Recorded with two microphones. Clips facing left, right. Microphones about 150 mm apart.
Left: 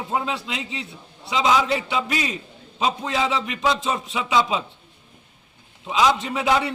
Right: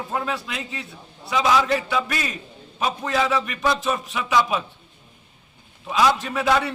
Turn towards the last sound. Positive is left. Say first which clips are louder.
# even
turn(degrees=15)  # may be behind; listen again after turning